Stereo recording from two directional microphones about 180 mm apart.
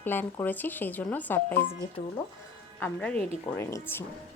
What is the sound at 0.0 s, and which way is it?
Speech, 10° left (ahead or behind).